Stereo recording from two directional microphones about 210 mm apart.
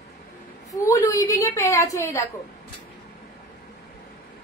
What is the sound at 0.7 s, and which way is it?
A woman's voice, 15° left (ahead or behind).